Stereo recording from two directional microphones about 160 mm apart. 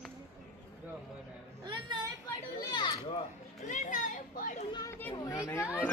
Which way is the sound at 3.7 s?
55° left (ahead or behind).